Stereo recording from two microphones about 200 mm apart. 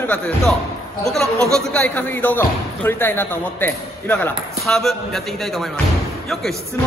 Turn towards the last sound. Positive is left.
turn(degrees=0)  # may be behind; listen again after turning